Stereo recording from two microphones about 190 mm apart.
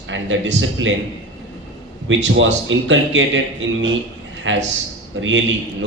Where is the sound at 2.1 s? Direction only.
75° right (ahead or behind).